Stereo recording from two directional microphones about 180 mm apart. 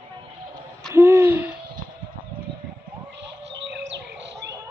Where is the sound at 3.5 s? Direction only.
80° right.